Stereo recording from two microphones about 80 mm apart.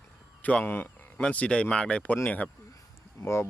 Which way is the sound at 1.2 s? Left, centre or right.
Centre.